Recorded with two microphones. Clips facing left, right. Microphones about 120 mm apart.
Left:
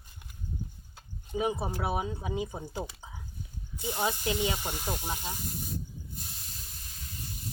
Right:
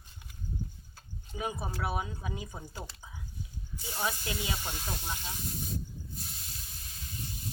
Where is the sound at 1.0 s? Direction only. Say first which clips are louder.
Left 6 dB; 20° left (ahead or behind).